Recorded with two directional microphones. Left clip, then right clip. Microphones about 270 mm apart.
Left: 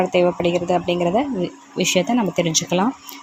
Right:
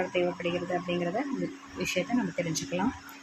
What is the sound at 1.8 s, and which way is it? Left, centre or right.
Speech, left.